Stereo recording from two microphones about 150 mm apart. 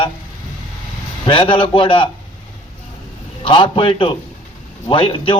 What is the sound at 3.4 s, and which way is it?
A man's voice, 35° left (ahead or behind).